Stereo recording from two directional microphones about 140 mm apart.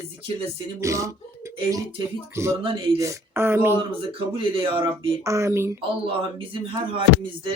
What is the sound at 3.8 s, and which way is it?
Speech, 35° right (ahead or behind).